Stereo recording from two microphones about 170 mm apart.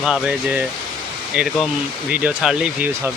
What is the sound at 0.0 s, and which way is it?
Speech, 5° right (ahead or behind).